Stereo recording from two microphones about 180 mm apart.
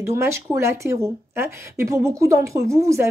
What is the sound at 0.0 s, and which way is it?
Speech, 15° right (ahead or behind).